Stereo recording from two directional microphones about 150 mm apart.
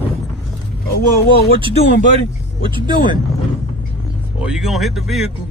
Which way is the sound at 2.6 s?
35° right (ahead or behind).